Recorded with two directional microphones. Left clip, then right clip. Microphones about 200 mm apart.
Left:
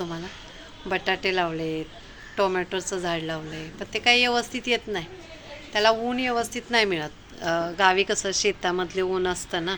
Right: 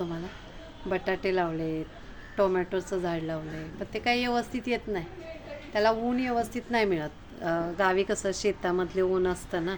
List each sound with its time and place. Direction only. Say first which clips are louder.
0.9 s a woman's voice: left 4 dB; 5° right (ahead or behind)